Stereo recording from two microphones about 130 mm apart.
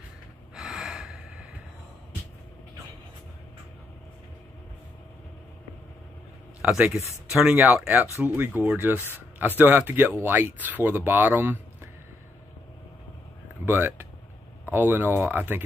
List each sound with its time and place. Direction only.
0.6 s gasp: 5° right (ahead or behind)
6.7 s speech: centre (ahead or behind)
13.7 s speech: 15° right (ahead or behind)